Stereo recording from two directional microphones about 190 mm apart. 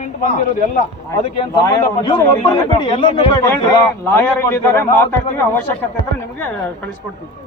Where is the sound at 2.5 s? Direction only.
30° left (ahead or behind).